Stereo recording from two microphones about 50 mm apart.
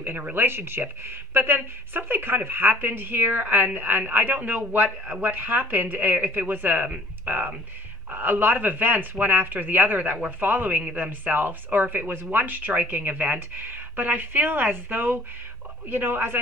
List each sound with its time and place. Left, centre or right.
0.2 s speech: right